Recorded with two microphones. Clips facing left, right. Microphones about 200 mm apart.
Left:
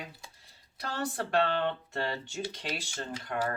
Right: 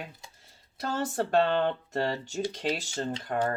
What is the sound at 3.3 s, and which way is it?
Speech, 45° right (ahead or behind).